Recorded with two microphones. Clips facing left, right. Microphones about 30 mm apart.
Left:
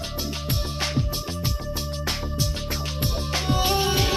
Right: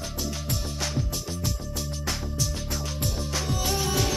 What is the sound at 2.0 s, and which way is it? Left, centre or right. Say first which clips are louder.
Music: left 2 dB; left.